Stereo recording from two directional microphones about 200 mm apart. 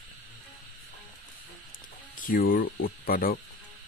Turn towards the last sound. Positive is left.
turn(degrees=45)  # may be behind; listen again after turning